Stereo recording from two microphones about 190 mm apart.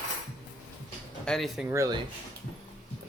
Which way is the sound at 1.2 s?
Centre (ahead or behind).